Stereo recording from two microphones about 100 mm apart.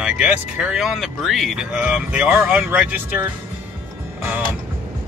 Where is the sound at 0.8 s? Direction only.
Centre (ahead or behind); by 3.2 s 20° right (ahead or behind).